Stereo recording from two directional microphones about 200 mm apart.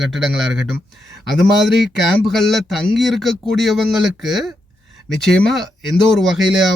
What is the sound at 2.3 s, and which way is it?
Speech, centre (ahead or behind).